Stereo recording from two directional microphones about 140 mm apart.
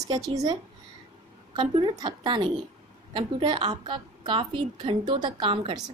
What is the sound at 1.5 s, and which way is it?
A woman's voice, 35° right (ahead or behind).